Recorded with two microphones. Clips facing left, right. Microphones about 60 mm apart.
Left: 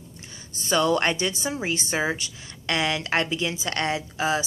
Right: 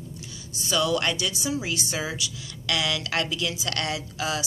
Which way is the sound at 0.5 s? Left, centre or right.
Left.